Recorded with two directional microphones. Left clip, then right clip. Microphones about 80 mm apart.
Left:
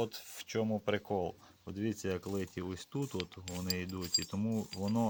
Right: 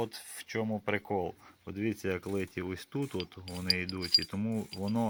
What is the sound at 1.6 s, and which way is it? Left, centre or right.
Speech, left.